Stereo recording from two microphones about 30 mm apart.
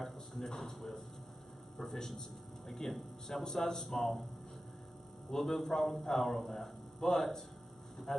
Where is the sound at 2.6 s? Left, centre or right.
Centre.